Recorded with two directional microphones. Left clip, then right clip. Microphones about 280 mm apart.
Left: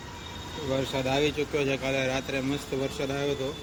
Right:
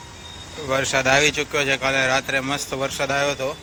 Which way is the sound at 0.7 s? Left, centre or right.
Right.